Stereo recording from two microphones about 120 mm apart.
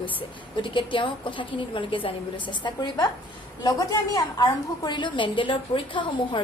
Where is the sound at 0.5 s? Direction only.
40° left (ahead or behind).